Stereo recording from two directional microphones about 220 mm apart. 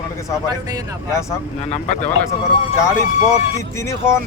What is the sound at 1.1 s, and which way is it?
Speech, 15° left (ahead or behind).